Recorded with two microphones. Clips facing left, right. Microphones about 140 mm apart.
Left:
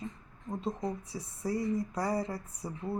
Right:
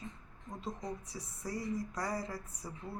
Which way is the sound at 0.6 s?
25° left (ahead or behind).